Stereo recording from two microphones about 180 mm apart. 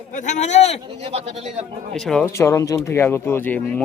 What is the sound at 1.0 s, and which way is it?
Speech, 35° right (ahead or behind).